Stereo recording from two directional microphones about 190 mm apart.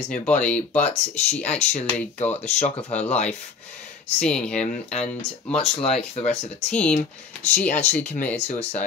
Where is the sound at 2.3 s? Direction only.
35° left (ahead or behind).